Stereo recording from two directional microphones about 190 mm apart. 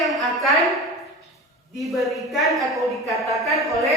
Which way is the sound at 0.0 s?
Centre (ahead or behind).